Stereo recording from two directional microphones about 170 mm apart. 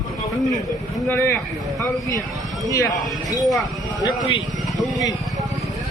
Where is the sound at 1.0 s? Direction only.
15° left (ahead or behind).